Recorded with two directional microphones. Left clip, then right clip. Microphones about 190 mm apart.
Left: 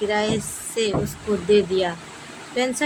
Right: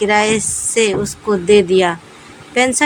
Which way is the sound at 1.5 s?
45° right (ahead or behind).